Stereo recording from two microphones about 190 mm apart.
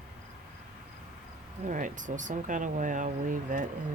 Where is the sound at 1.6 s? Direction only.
45° right (ahead or behind).